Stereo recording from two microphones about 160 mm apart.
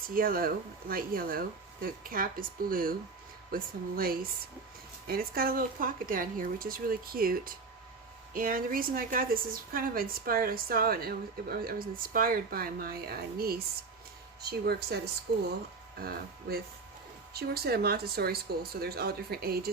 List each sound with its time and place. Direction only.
0.1 s a woman's voice: 65° right (ahead or behind)